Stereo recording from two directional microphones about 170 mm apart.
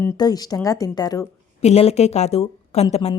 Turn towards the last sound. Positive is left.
turn(degrees=40)  # may be behind; listen again after turning